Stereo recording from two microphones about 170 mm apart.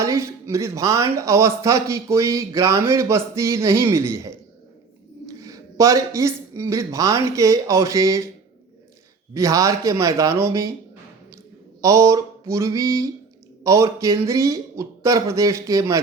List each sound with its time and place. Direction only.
0.0 s speech: 15° right (ahead or behind)
5.4 s speech: 20° right (ahead or behind)
9.3 s speech: 20° right (ahead or behind)
11.8 s speech: 20° right (ahead or behind)